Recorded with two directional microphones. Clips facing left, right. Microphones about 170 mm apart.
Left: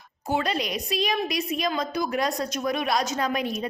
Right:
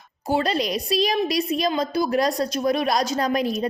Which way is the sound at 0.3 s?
35° right (ahead or behind).